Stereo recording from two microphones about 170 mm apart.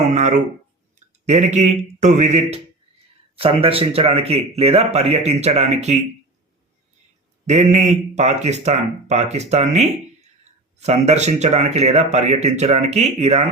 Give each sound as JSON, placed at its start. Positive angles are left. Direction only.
{"t": 0.1, "sound": "a sound", "side_deg": -45}
{"t": 1.2, "sound": "a man's voice", "side_deg": -40}
{"t": 7.4, "sound": "speech", "side_deg": -40}